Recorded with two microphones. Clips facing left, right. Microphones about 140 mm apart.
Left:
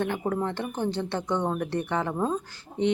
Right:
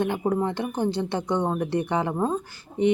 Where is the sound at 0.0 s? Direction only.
15° right (ahead or behind).